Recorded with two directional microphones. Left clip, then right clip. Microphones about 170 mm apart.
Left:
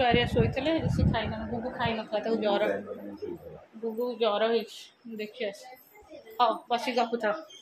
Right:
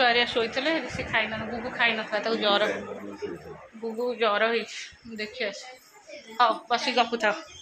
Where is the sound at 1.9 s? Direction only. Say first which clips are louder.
Right 3 dB; 15° left (ahead or behind).